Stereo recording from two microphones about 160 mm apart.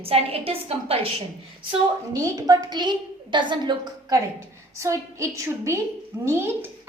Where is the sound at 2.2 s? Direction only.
20° right (ahead or behind).